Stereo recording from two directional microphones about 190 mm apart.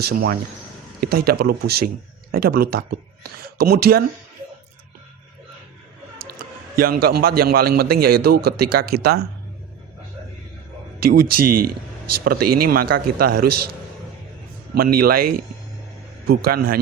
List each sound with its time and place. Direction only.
0.0 s a man's voice: 55° right (ahead or behind)
6.7 s a man's voice: 50° right (ahead or behind)
11.0 s a man's voice: 55° right (ahead or behind)
14.8 s a man's voice: 50° right (ahead or behind)
16.3 s a man's voice: 50° right (ahead or behind)